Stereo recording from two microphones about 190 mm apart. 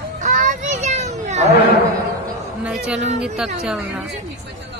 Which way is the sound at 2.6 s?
5° right (ahead or behind).